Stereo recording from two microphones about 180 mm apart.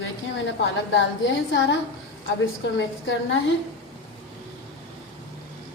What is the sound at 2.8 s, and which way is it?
Speech, 90° left.